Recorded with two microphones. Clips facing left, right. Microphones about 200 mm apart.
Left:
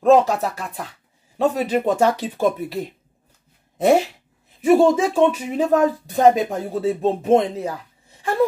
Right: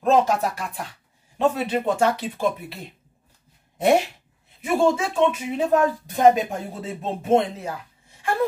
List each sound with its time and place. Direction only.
0.1 s speech: 35° left (ahead or behind)
4.6 s speech: 40° left (ahead or behind)